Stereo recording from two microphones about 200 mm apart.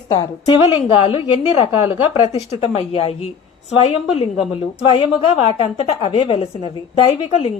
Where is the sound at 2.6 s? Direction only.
30° left (ahead or behind).